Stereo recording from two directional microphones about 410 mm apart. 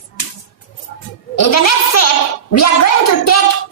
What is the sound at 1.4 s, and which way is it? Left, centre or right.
A woman's voice, left.